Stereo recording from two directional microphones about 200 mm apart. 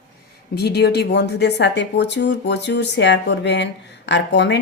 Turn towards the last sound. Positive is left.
turn(degrees=60)  # may be behind; listen again after turning